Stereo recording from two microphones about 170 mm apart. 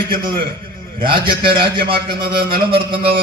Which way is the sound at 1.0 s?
30° right (ahead or behind).